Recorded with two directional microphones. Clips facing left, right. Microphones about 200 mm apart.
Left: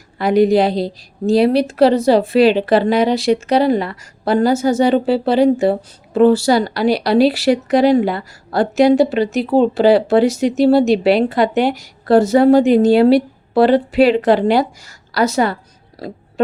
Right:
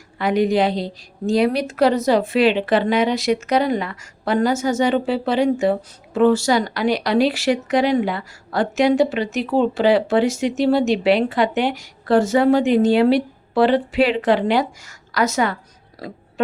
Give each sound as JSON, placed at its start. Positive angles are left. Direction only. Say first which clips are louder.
{"t": 0.2, "sound": "speech", "louder": "left 5 dB", "side_deg": 35}